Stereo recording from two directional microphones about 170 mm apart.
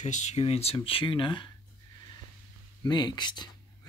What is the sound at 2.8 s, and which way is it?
Speech, 25° left (ahead or behind).